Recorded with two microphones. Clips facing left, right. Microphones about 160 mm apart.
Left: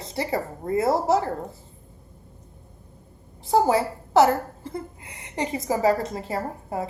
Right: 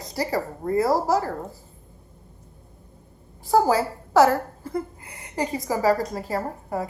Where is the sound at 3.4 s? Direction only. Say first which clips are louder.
Right 1 dB; 20° left (ahead or behind).